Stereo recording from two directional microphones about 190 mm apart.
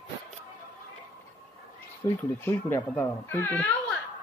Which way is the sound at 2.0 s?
15° left (ahead or behind).